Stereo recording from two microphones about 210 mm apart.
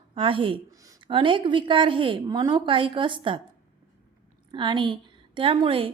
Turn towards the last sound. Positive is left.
turn(degrees=-25)  # may be behind; listen again after turning